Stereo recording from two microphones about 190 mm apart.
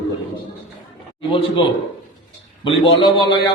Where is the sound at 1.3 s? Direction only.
25° left (ahead or behind).